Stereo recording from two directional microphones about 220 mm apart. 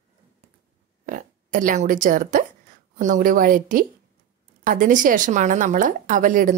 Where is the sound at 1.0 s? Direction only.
35° right (ahead or behind).